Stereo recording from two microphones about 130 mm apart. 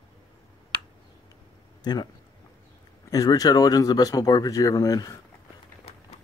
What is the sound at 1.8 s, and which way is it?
Speech, 30° left (ahead or behind).